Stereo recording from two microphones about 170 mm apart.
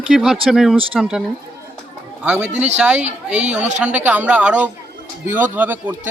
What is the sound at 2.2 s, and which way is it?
A man's voice, 5° right (ahead or behind).